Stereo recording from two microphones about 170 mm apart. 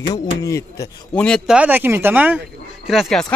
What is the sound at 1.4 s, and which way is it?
Speech, 10° right (ahead or behind).